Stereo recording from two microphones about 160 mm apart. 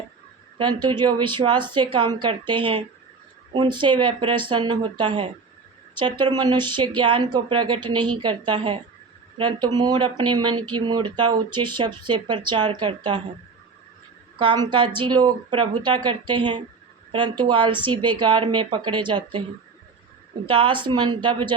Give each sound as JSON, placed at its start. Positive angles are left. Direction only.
{"t": 0.6, "sound": "speech", "side_deg": -30}
{"t": 14.3, "sound": "speech", "side_deg": -30}
{"t": 20.5, "sound": "speech", "side_deg": -30}